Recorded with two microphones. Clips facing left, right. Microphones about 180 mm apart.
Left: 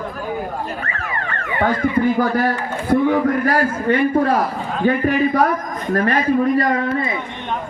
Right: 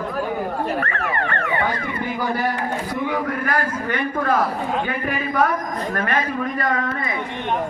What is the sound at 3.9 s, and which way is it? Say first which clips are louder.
A man's voice: left 7 dB; 30° left (ahead or behind).